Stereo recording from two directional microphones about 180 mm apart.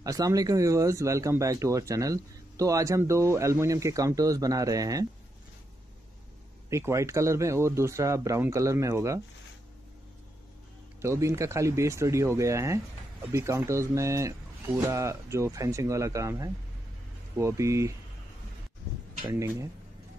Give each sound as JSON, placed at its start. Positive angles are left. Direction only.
{"t": 0.0, "sound": "speech", "side_deg": -20}
{"t": 6.7, "sound": "speech", "side_deg": -15}
{"t": 11.0, "sound": "speech", "side_deg": -15}
{"t": 19.3, "sound": "speech", "side_deg": -15}